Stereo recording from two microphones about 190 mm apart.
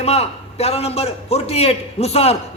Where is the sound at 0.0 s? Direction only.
35° left (ahead or behind).